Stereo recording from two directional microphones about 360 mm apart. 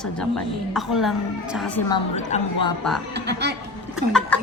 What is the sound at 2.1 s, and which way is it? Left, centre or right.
Speech, centre.